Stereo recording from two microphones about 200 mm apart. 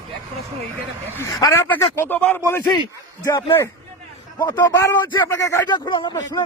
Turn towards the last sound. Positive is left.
turn(degrees=20)  # may be behind; listen again after turning